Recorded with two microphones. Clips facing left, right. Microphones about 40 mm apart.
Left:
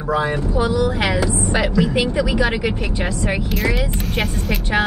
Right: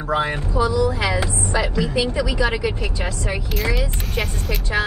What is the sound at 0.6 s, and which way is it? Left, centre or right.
Speech, left.